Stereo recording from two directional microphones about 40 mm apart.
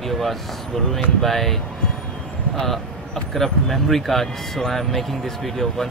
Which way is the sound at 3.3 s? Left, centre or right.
Centre.